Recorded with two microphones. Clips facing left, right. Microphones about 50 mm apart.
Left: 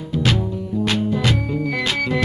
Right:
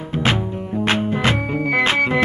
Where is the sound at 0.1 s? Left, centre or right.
Right.